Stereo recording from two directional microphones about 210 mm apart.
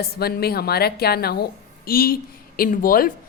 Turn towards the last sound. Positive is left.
turn(degrees=45)  # may be behind; listen again after turning